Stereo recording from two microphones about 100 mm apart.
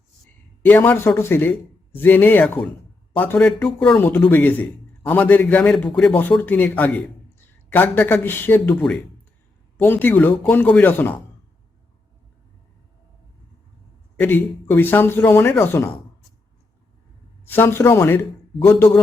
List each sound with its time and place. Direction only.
0.6 s a man's voice: 20° left (ahead or behind)
3.9 s a man's voice: 20° left (ahead or behind)
9.8 s a man's voice: 20° left (ahead or behind)
14.2 s a man's voice: 20° left (ahead or behind)
17.4 s a man's voice: 20° left (ahead or behind)